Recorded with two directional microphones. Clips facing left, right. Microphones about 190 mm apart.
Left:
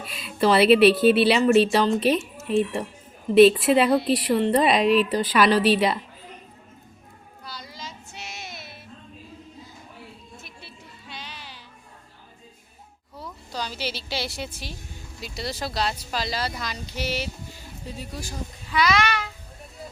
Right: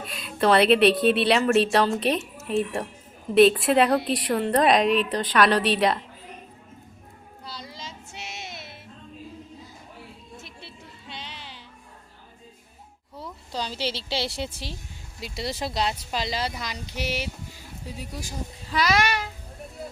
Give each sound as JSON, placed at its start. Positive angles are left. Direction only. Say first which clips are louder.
{"t": 0.0, "sound": "speech", "louder": "left 1 dB", "side_deg": 0}
{"t": 7.4, "sound": "child singing", "louder": "even", "side_deg": -25}
{"t": 10.4, "sound": "a sound", "louder": "right 1 dB", "side_deg": -25}
{"t": 13.1, "sound": "a woman's voice", "louder": "right 1 dB", "side_deg": -25}
{"t": 18.7, "sound": "a child's voice", "louder": "left 1 dB", "side_deg": -40}